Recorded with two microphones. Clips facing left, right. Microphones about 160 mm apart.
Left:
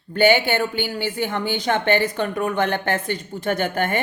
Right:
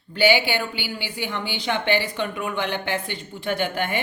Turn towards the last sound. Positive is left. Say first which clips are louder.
# left 3 dB
turn(degrees=45)  # may be behind; listen again after turning